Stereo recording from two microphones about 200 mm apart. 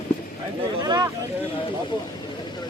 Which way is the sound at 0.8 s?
20° right (ahead or behind).